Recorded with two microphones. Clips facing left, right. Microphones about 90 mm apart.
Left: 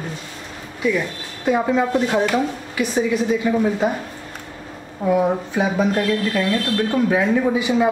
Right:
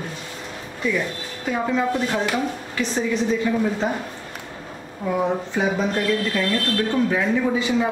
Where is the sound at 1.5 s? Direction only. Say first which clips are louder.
Left 4 dB; 20° left (ahead or behind).